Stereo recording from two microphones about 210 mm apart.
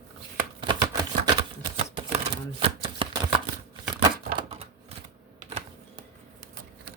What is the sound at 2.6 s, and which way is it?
Shuffling cards, 25° right (ahead or behind).